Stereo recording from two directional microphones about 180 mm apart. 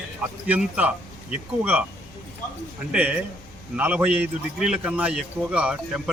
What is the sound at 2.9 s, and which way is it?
A man's voice, 5° right (ahead or behind).